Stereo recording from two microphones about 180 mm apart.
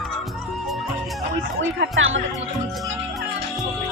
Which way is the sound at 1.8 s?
90° right.